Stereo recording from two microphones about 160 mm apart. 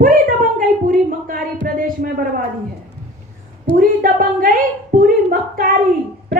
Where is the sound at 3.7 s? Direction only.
60° right (ahead or behind).